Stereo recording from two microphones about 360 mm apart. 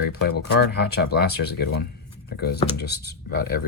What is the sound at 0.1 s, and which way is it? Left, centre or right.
Speech, left.